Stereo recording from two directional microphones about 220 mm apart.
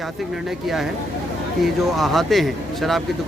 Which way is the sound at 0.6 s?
Centre (ahead or behind).